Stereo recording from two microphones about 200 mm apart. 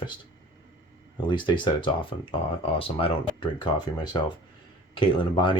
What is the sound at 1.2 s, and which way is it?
Speech, 25° left (ahead or behind).